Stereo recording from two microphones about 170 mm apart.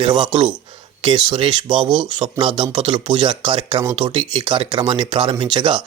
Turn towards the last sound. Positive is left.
turn(degrees=-30)  # may be behind; listen again after turning